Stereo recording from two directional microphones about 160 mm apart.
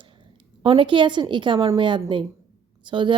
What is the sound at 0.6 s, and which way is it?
A woman's voice, 30° right (ahead or behind).